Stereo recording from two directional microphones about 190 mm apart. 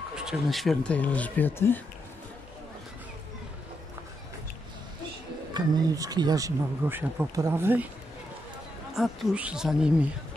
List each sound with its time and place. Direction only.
0.1 s speech: 5° right (ahead or behind)
5.5 s speech: 20° right (ahead or behind)
8.9 s speech: centre (ahead or behind)